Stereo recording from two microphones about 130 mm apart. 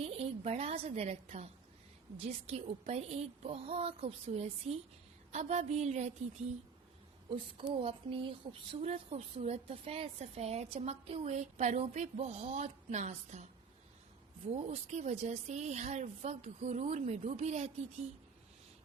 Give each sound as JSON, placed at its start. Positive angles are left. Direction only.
{"t": 0.0, "sound": "a sound", "side_deg": -50}
{"t": 2.1, "sound": "a woman's voice", "side_deg": -50}
{"t": 7.7, "sound": "a woman's voice", "side_deg": -45}
{"t": 8.8, "sound": "a woman's voice", "side_deg": -55}
{"t": 14.5, "sound": "a woman's voice", "side_deg": -60}